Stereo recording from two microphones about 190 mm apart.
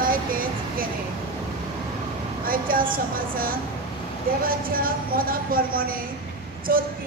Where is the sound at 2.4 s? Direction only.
50° right (ahead or behind).